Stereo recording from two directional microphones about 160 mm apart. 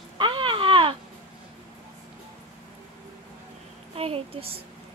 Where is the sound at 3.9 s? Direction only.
35° right (ahead or behind).